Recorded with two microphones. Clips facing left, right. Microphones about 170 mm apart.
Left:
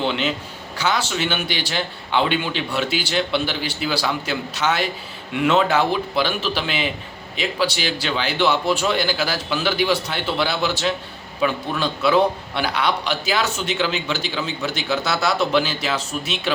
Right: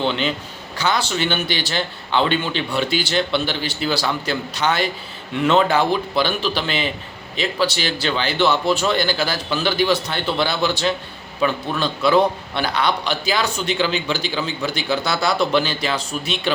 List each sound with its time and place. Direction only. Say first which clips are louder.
0.0 s a man's voice: right 1 dB; 5° left (ahead or behind)